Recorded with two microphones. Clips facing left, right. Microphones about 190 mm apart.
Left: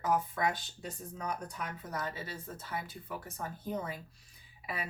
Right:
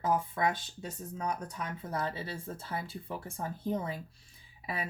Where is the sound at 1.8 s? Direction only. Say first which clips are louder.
Right 5 dB; 30° right (ahead or behind).